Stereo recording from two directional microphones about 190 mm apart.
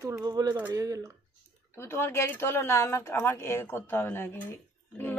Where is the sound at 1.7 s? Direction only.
15° left (ahead or behind).